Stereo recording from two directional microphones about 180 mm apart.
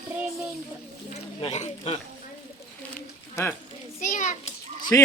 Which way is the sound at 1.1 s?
35° left (ahead or behind).